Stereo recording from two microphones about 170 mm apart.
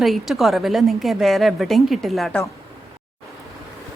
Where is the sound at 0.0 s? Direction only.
Centre (ahead or behind).